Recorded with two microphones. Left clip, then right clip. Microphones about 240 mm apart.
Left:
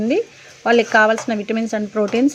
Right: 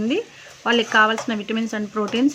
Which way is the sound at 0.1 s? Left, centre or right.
Centre.